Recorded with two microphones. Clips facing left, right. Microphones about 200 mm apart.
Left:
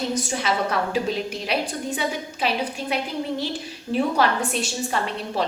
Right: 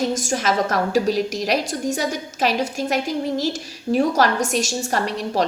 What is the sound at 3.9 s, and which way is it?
A woman's voice, 45° right (ahead or behind).